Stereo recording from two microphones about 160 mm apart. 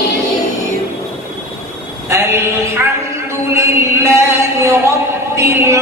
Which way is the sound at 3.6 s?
20° right (ahead or behind).